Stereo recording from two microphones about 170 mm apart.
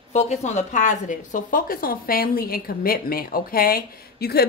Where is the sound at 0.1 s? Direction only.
40° left (ahead or behind).